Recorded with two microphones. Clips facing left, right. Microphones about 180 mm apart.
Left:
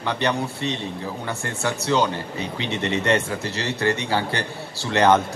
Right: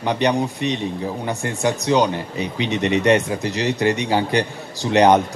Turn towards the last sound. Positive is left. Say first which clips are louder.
# right 4 dB
turn(degrees=-15)  # may be behind; listen again after turning